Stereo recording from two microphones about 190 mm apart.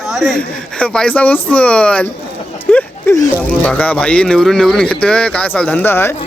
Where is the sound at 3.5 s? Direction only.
5° left (ahead or behind).